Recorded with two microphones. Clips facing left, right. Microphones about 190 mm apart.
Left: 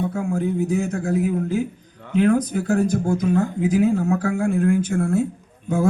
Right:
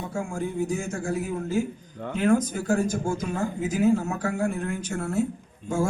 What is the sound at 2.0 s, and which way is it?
Speech, 40° right (ahead or behind).